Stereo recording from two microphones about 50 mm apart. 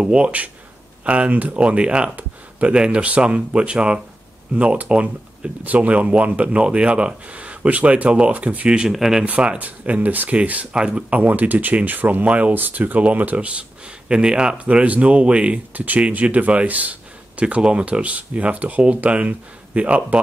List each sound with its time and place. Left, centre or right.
0.1 s speech: right
8.6 s speech: centre
8.9 s speech: centre
9.2 s speech: right
10.7 s speech: centre
13.5 s speech: right